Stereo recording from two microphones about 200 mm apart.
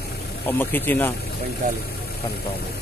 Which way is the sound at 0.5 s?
10° left (ahead or behind).